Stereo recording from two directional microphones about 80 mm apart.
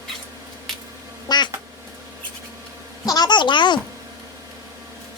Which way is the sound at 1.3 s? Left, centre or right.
Left.